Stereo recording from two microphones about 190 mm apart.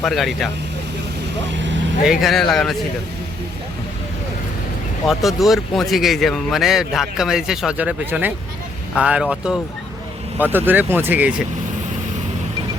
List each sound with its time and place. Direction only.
0.0 s speech: centre (ahead or behind)
1.5 s vehicle: 70° right (ahead or behind)
2.0 s speech: centre (ahead or behind)
5.0 s speech: centre (ahead or behind)